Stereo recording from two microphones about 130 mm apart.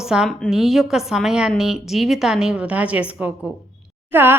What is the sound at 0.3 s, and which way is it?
A woman's voice, 5° left (ahead or behind).